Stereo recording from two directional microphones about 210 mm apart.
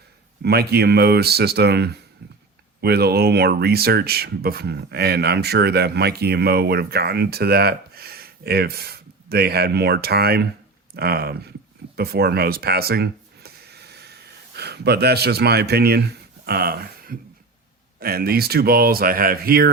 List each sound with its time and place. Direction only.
0.4 s speech: 50° right (ahead or behind)